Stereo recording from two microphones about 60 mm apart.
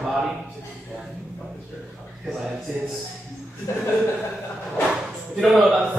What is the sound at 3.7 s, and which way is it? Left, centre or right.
Chuckle, left.